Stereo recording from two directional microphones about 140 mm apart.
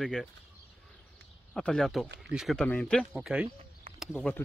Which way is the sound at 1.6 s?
5° left (ahead or behind).